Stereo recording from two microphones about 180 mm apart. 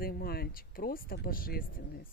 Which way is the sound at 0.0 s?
55° left (ahead or behind).